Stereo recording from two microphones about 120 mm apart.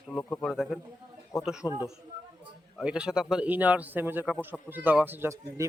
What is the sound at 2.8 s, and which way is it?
Speech, 5° right (ahead or behind).